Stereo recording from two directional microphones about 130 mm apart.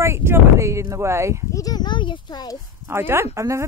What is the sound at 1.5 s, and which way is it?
Speech, 30° left (ahead or behind).